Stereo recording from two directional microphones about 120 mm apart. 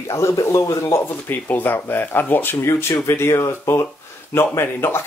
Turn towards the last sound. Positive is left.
turn(degrees=20)  # may be behind; listen again after turning